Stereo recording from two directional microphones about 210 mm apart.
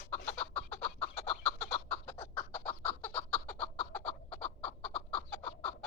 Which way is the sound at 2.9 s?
10° left (ahead or behind).